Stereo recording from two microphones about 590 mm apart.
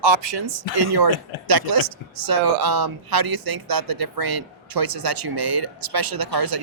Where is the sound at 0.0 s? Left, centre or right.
Right.